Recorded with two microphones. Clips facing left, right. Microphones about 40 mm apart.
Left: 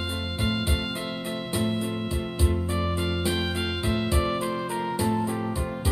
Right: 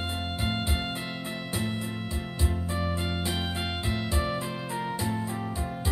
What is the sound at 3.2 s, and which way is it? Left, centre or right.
Music, left.